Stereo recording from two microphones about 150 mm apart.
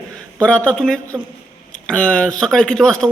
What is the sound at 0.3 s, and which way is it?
A man's voice, 10° left (ahead or behind).